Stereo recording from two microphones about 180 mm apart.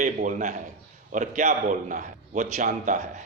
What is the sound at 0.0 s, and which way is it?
Speech, 45° right (ahead or behind).